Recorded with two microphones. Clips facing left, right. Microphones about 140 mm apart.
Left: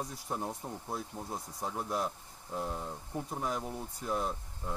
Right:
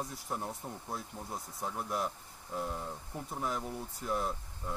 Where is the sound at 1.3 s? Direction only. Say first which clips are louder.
Left 1 dB; centre (ahead or behind).